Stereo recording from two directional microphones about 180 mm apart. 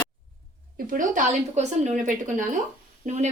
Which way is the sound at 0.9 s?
45° right (ahead or behind).